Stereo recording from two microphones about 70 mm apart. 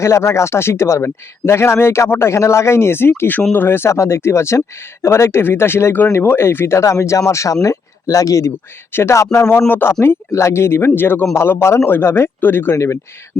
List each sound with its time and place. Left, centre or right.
0.0 s a man's voice: left
3.9 s a man's voice: left
8.9 s a man's voice: left
9.6 s a man's voice: left
12.7 s speech: left